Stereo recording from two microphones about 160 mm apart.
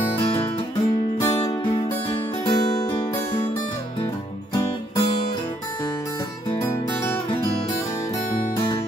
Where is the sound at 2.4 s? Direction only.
25° left (ahead or behind).